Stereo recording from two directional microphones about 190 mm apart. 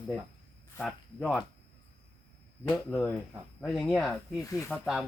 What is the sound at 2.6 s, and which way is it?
Speech, 5° left (ahead or behind).